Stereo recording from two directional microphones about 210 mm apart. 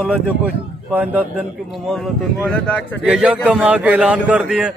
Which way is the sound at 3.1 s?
5° right (ahead or behind).